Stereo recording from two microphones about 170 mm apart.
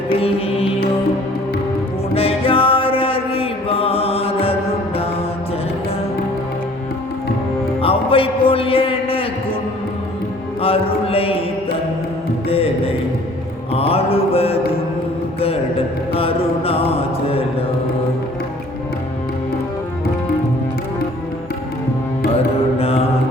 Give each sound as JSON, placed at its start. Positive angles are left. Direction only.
{"t": 0.2, "sound": "music", "side_deg": 35}
{"t": 2.1, "sound": "mantra", "side_deg": 35}
{"t": 7.8, "sound": "a sound", "side_deg": 35}
{"t": 10.6, "sound": "mantra", "side_deg": 35}
{"t": 12.5, "sound": "music", "side_deg": 35}
{"t": 13.7, "sound": "mantra", "side_deg": 35}
{"t": 16.1, "sound": "mantra", "side_deg": 35}
{"t": 22.8, "sound": "mantra", "side_deg": 35}